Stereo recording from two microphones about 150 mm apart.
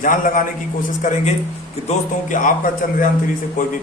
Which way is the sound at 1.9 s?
60° left (ahead or behind).